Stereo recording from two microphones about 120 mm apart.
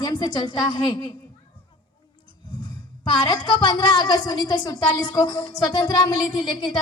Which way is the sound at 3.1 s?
35° left (ahead or behind).